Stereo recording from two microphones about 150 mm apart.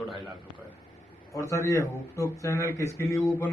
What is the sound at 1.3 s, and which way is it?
A man's voice, 20° left (ahead or behind).